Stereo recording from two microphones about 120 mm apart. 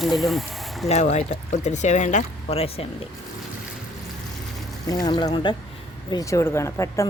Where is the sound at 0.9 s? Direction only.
70° left (ahead or behind); by 2.6 s 90° left.